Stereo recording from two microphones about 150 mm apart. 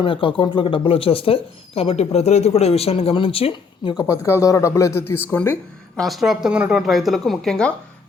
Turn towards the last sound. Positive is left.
turn(degrees=5)  # may be behind; listen again after turning